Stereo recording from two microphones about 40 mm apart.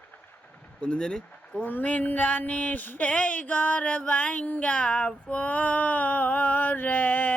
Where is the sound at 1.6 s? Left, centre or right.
Left.